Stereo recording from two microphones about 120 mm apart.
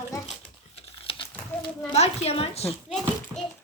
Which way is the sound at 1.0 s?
45° left (ahead or behind).